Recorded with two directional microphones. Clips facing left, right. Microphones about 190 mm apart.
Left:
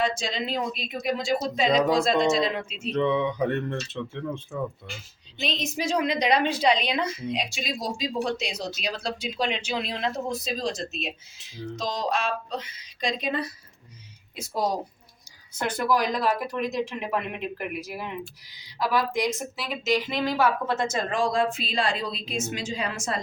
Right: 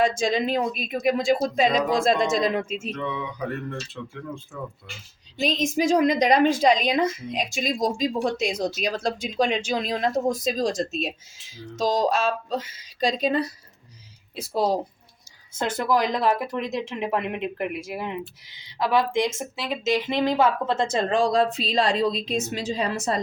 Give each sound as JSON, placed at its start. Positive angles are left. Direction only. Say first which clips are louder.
{"t": 0.0, "sound": "a woman's voice", "louder": "right 6 dB", "side_deg": -50}
{"t": 2.9, "sound": "speech", "louder": "left 7 dB", "side_deg": 20}
{"t": 5.4, "sound": "a woman's voice", "louder": "right 7 dB", "side_deg": -45}